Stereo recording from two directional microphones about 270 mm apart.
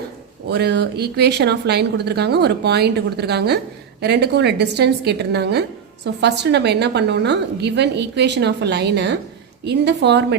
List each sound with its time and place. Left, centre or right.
0.4 s speech: right